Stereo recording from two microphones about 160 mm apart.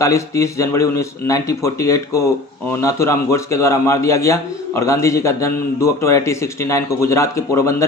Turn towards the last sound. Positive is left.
turn(degrees=20)  # may be behind; listen again after turning